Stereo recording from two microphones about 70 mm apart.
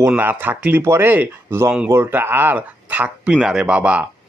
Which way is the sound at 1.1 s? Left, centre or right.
Right.